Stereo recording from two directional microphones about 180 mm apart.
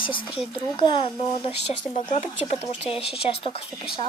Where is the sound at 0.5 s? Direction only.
30° left (ahead or behind).